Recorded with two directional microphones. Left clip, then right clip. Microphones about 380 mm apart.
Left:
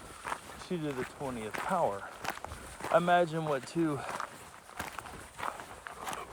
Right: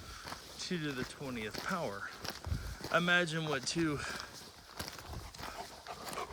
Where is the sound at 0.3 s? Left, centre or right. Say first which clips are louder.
Left 5 dB; centre.